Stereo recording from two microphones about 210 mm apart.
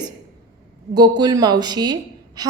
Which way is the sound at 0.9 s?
20° right (ahead or behind).